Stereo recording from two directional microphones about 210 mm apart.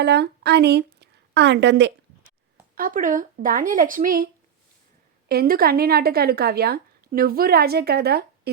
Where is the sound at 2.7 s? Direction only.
40° right (ahead or behind).